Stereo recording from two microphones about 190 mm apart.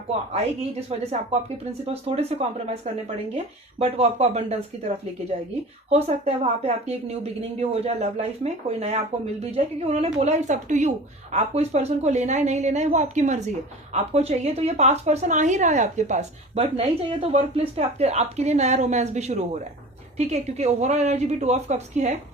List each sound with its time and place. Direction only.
0.9 s a woman's voice: 35° right (ahead or behind)
5.9 s a woman's voice: 35° right (ahead or behind)